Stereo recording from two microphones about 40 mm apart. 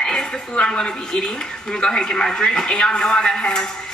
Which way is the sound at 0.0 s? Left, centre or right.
Centre.